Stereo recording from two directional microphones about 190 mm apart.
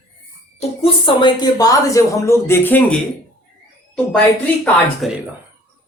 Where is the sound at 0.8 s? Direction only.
25° left (ahead or behind); by 3.0 s 10° left (ahead or behind).